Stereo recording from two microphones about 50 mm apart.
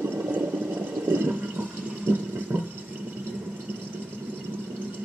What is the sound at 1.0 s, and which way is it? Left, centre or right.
Toilet flush, right.